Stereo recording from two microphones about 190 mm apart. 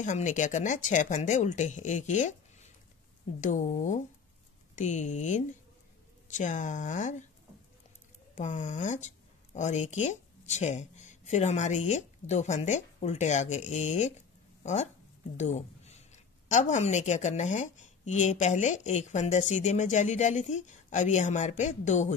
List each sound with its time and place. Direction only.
0.0 s a woman's voice: 40° left (ahead or behind)
8.4 s a woman's voice: 40° left (ahead or behind)